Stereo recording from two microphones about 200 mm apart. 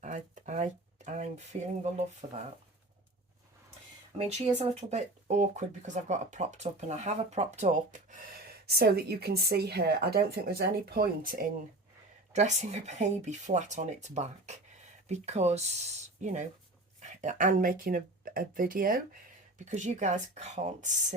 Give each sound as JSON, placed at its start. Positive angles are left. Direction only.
{"t": 0.0, "sound": "a sound", "side_deg": -35}
{"t": 2.2, "sound": "speech", "side_deg": -35}
{"t": 4.2, "sound": "speech", "side_deg": -30}